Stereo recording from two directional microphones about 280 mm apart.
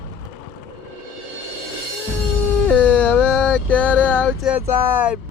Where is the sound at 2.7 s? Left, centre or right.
Centre.